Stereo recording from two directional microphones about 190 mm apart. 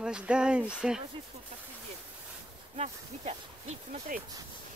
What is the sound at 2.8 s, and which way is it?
Speech, 35° right (ahead or behind).